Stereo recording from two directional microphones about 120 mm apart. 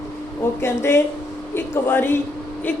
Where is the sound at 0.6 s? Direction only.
20° left (ahead or behind).